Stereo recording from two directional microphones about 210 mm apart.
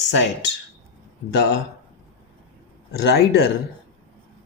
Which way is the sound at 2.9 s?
50° left (ahead or behind).